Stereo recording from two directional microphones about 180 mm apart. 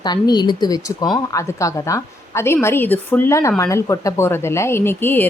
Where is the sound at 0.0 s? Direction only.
25° left (ahead or behind).